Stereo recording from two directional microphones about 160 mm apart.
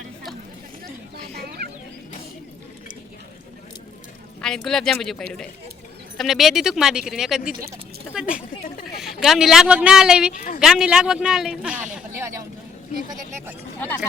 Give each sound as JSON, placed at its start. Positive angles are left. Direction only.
{"t": 4.4, "sound": "a man's voice", "side_deg": 5}
{"t": 10.3, "sound": "a woman's voice", "side_deg": 55}
{"t": 10.6, "sound": "a man's voice", "side_deg": -5}
{"t": 13.1, "sound": "speech", "side_deg": -15}
{"t": 13.7, "sound": "speech", "side_deg": 10}